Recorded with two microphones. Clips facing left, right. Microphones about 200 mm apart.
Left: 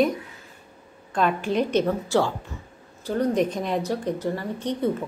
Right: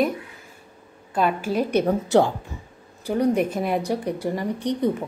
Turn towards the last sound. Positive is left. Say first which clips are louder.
# right 3 dB
turn(degrees=-15)  # may be behind; listen again after turning